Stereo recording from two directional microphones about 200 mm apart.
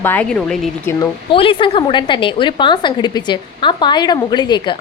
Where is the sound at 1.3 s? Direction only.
25° left (ahead or behind).